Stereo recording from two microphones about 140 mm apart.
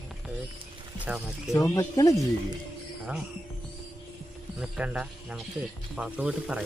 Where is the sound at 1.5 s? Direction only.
20° left (ahead or behind).